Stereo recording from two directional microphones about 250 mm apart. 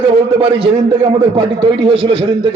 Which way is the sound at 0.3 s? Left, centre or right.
Right.